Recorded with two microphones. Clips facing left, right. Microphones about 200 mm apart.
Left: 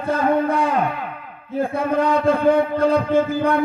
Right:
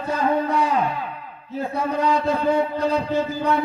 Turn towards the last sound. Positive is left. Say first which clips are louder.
# left 4 dB
turn(degrees=50)  # may be behind; listen again after turning